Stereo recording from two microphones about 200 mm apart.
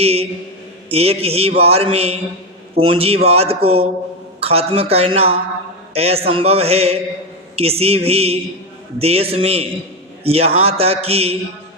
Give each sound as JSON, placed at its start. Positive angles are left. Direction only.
{"t": 0.0, "sound": "mantra", "side_deg": -30}
{"t": 2.7, "sound": "a man's voice", "side_deg": -30}
{"t": 4.4, "sound": "mantra", "side_deg": -30}